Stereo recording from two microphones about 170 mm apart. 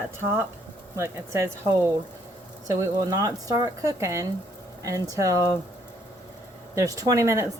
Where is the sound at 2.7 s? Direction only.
20° right (ahead or behind).